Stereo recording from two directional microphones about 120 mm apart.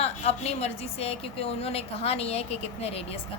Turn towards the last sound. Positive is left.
turn(degrees=55)  # may be behind; listen again after turning